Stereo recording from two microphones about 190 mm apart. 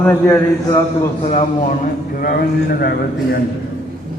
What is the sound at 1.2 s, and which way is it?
A man's voice, 35° left (ahead or behind).